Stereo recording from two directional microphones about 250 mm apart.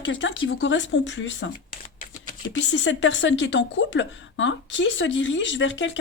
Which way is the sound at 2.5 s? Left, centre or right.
Left.